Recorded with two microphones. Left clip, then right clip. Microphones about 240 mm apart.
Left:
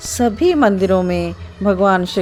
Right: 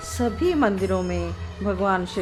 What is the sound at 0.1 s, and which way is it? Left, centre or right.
A woman's voice, left.